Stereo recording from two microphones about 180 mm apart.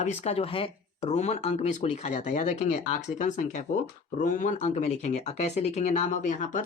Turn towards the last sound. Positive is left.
turn(degrees=45)  # may be behind; listen again after turning